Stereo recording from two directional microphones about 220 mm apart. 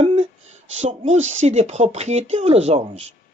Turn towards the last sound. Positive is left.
turn(degrees=-30)  # may be behind; listen again after turning